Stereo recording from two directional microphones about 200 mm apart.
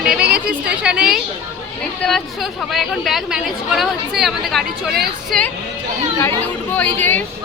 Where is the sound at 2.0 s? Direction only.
Centre (ahead or behind).